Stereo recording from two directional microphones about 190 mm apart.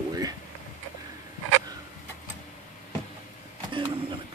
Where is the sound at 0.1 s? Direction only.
20° right (ahead or behind).